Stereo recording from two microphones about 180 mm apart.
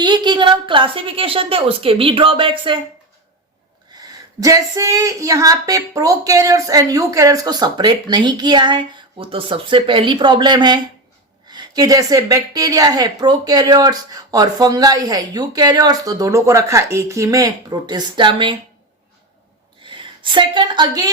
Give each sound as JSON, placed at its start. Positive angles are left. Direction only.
{"t": 0.0, "sound": "a woman's voice", "side_deg": -25}
{"t": 3.9, "sound": "a woman's voice", "side_deg": -20}
{"t": 19.8, "sound": "a woman's voice", "side_deg": -25}